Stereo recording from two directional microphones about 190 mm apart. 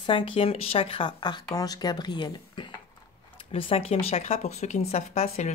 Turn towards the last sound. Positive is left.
turn(degrees=35)  # may be behind; listen again after turning